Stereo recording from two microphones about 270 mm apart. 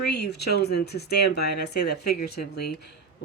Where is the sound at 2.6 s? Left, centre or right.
Left.